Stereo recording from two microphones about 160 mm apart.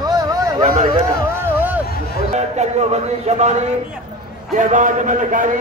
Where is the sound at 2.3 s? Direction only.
45° right (ahead or behind).